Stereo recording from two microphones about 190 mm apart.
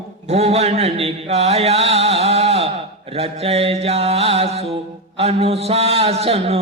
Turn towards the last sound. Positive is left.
turn(degrees=-30)  # may be behind; listen again after turning